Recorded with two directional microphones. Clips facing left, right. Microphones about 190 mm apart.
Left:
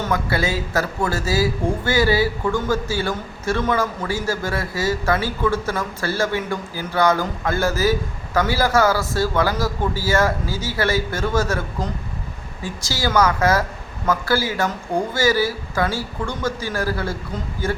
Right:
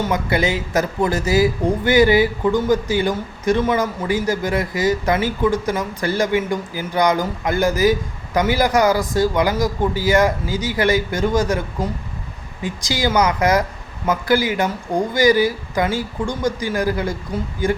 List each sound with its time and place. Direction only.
0.0 s speech: 20° right (ahead or behind)